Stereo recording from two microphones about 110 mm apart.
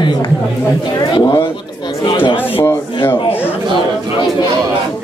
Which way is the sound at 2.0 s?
50° left (ahead or behind).